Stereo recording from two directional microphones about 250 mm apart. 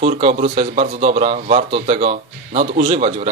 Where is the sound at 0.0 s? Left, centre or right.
Right.